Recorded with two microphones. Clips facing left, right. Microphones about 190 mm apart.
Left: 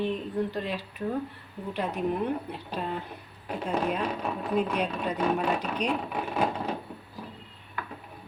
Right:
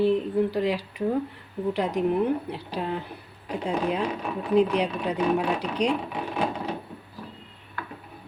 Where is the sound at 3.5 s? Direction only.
10° right (ahead or behind).